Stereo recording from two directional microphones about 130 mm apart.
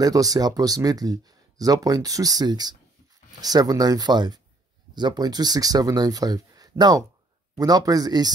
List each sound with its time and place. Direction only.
0.0 s speech: 30° right (ahead or behind)